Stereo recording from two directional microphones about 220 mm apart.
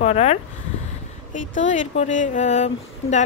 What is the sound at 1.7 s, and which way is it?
Speech, 35° left (ahead or behind).